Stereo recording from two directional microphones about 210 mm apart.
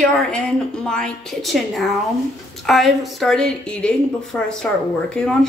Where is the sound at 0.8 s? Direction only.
5° left (ahead or behind).